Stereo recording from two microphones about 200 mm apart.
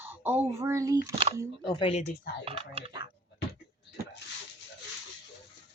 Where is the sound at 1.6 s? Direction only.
25° left (ahead or behind).